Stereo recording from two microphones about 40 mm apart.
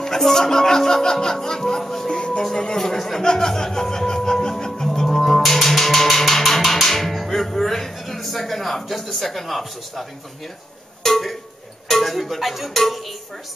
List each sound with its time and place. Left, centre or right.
0.0 s speech: centre
2.1 s music: left
2.5 s speech: centre
2.8 s speech: centre
3.2 s music: centre
11.0 s a sound: centre
12.0 s music: centre